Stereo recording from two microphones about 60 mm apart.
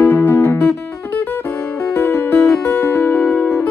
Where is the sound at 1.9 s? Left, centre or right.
Left.